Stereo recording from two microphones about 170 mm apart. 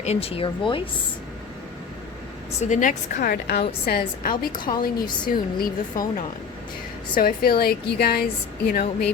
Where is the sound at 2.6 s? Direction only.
45° left (ahead or behind); by 4.0 s 65° left (ahead or behind).